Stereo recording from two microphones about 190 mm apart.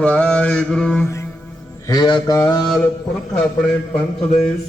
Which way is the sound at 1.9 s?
20° left (ahead or behind).